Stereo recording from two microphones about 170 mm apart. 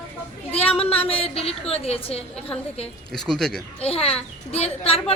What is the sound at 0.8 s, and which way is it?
A child's voice, 35° left (ahead or behind).